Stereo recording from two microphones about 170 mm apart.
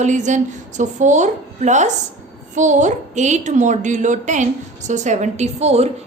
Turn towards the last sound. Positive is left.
turn(degrees=-40)  # may be behind; listen again after turning